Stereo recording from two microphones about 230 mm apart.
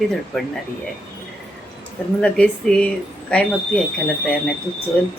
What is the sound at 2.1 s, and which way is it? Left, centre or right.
A woman's voice, centre.